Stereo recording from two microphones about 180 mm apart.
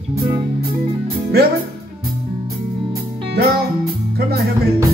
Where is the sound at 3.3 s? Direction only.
60° right (ahead or behind).